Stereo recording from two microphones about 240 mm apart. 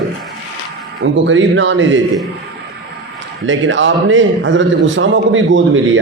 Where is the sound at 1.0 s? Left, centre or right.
Right.